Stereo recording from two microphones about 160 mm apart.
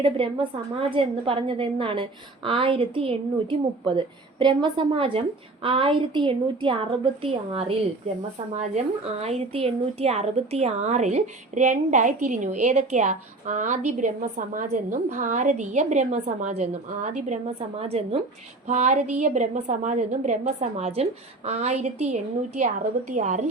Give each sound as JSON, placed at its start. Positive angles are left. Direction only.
{"t": 0.8, "sound": "a woman's voice", "side_deg": -35}
{"t": 9.2, "sound": "a woman's voice", "side_deg": -40}